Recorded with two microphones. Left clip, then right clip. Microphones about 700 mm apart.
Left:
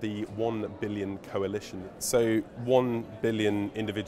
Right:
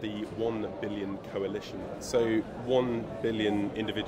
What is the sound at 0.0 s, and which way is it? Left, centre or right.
A man's voice, left.